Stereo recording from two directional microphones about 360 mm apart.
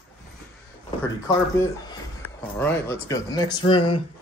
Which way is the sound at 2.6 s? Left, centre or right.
Centre.